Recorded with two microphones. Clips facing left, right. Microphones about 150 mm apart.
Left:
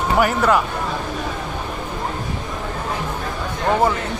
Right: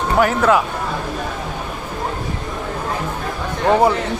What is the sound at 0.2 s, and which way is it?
Speech, centre (ahead or behind).